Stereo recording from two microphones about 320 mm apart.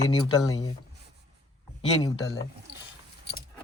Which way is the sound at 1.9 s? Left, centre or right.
Centre.